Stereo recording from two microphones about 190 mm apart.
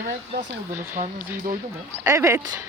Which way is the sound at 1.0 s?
40° right (ahead or behind).